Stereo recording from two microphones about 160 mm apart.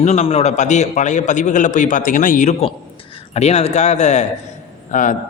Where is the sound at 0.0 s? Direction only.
45° left (ahead or behind).